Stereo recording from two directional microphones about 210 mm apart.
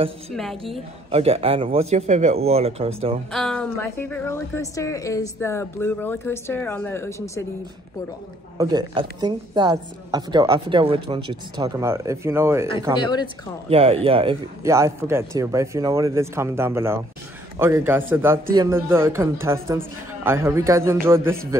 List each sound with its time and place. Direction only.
0.4 s a woman's voice: centre (ahead or behind)
1.1 s speech: 30° right (ahead or behind)
3.3 s a woman's voice: 5° left (ahead or behind)
8.5 s speech: 20° right (ahead or behind)
13.0 s speech: 20° left (ahead or behind)
13.7 s speech: 25° right (ahead or behind)
14.6 s speech: 15° right (ahead or behind)